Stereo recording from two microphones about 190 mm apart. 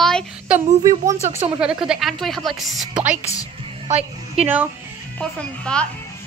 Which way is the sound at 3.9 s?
35° right (ahead or behind).